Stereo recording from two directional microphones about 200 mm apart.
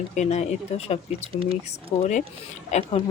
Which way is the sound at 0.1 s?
35° left (ahead or behind).